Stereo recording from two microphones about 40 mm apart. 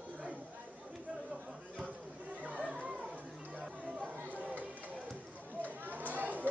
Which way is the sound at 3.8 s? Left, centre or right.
Right.